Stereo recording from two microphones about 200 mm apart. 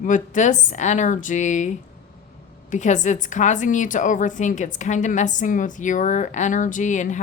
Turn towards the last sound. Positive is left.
turn(degrees=40)  # may be behind; listen again after turning